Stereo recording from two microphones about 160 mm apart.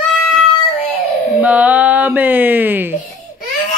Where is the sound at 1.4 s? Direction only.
10° right (ahead or behind).